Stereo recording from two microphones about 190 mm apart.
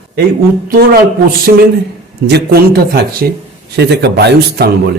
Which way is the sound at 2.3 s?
55° right (ahead or behind).